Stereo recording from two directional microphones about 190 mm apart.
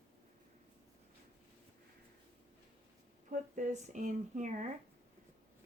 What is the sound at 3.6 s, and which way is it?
Speech, 40° right (ahead or behind).